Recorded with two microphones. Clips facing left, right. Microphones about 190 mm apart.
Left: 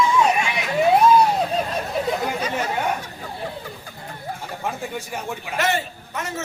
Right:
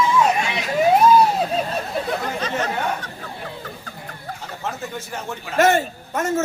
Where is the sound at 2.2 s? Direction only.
10° left (ahead or behind).